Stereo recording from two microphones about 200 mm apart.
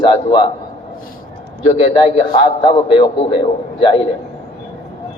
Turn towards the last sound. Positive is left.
turn(degrees=25)  # may be behind; listen again after turning